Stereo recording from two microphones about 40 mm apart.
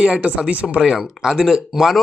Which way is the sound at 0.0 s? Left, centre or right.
Right.